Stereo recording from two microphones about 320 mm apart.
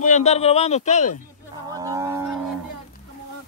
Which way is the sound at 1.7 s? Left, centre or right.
Centre.